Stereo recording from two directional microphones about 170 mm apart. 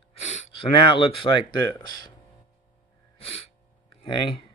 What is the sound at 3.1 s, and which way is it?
Gasp, 35° left (ahead or behind).